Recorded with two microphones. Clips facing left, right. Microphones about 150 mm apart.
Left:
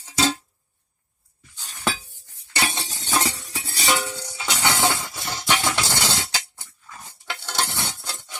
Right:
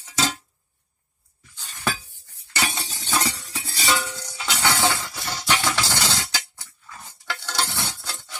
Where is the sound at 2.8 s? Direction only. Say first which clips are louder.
Left 1 dB; 20° left (ahead or behind).